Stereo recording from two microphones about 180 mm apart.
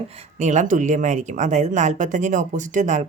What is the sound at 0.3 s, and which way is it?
Speech, 40° right (ahead or behind).